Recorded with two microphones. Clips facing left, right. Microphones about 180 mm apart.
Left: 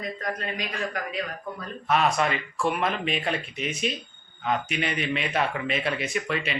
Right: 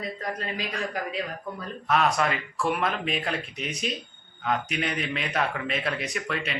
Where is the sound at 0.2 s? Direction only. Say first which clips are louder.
Left 1 dB; 30° right (ahead or behind).